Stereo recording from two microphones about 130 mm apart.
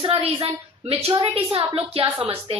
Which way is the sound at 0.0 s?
45° right (ahead or behind).